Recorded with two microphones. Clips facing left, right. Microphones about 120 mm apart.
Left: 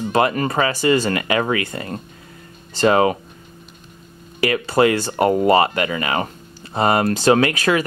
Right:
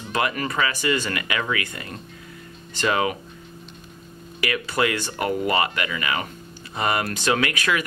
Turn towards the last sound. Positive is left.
turn(degrees=35)  # may be behind; listen again after turning